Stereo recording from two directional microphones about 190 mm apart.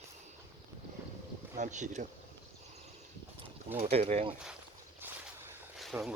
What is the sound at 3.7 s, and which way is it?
Speech, 30° right (ahead or behind).